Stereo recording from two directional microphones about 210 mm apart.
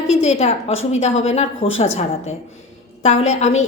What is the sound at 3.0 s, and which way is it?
Speech, 30° left (ahead or behind).